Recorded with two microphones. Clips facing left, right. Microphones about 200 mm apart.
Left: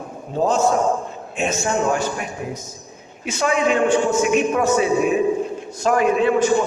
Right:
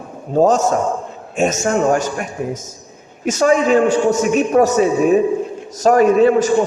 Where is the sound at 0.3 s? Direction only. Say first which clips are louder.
Right 4 dB; 45° right (ahead or behind).